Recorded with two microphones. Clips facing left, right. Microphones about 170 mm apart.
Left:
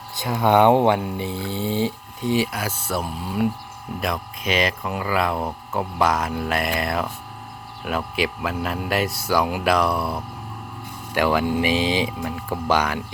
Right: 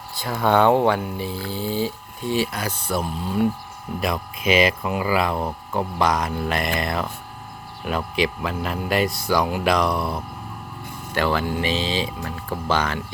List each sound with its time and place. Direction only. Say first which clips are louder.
0.2 s speech: left 2 dB; 20° left (ahead or behind)
4.0 s speech: right 3 dB; 5° right (ahead or behind); by 13.0 s 10° left (ahead or behind)